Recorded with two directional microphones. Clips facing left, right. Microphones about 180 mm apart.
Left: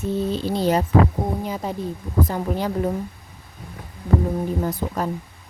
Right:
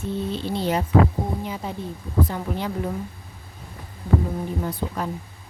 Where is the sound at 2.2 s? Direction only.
40° left (ahead or behind).